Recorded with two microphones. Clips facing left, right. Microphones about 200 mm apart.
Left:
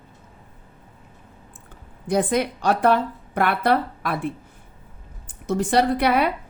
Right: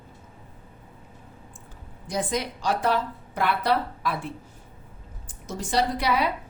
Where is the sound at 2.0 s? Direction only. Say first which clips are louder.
Left 7 dB; 60° left (ahead or behind).